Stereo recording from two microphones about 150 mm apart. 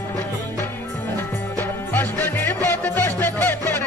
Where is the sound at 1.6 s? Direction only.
15° left (ahead or behind).